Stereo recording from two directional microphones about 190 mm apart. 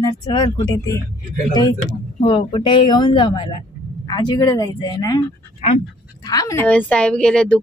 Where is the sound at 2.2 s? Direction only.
25° left (ahead or behind).